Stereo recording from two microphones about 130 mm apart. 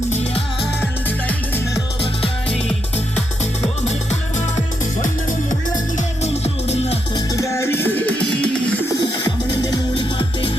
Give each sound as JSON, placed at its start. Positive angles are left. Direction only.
{"t": 1.0, "sound": "music", "side_deg": 15}
{"t": 3.8, "sound": "music", "side_deg": 60}
{"t": 6.0, "sound": "music", "side_deg": 55}
{"t": 7.2, "sound": "music", "side_deg": 25}
{"t": 9.6, "sound": "music", "side_deg": 30}